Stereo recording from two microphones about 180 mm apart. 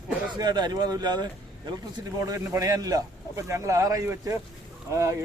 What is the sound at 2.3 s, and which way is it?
Speech, 20° right (ahead or behind).